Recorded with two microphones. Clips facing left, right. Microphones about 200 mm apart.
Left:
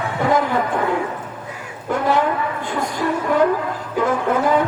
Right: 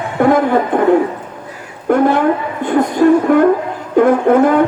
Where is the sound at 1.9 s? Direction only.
55° right (ahead or behind).